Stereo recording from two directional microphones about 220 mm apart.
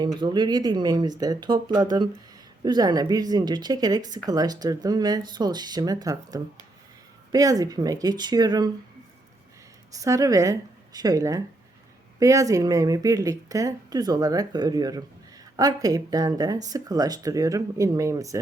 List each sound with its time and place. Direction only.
0.0 s speech: 20° right (ahead or behind)
9.9 s speech: 15° right (ahead or behind)